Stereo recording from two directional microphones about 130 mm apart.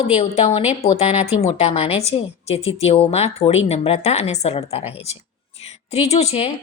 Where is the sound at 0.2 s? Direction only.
55° left (ahead or behind).